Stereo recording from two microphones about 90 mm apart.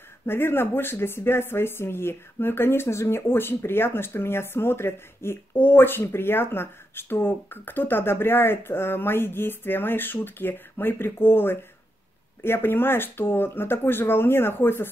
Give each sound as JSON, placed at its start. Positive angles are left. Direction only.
{"t": 0.3, "sound": "speech", "side_deg": 25}